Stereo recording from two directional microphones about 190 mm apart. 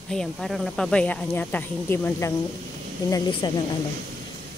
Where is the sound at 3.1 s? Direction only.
25° left (ahead or behind).